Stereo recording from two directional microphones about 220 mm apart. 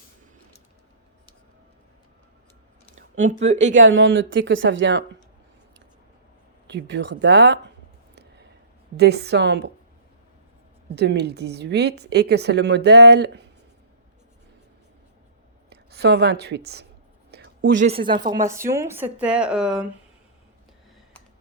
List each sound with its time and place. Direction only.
2.9 s a sound: 35° right (ahead or behind)
3.4 s speech: 30° right (ahead or behind)
3.8 s a woman's voice: 60° right (ahead or behind)
6.7 s a woman's voice: 50° right (ahead or behind)
8.1 s a sound: 50° right (ahead or behind)
9.0 s a woman's voice: 50° right (ahead or behind)
10.9 s a woman's voice: 50° right (ahead or behind)
15.7 s a woman's voice: 50° right (ahead or behind)
17.3 s a sound: 55° right (ahead or behind)
17.7 s speech: 25° right (ahead or behind); by 19.9 s 5° right (ahead or behind)